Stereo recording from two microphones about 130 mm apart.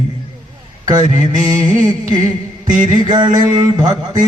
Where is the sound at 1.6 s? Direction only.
90° right.